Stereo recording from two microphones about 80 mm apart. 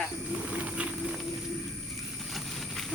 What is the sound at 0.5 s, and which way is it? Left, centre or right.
Vehicle, centre.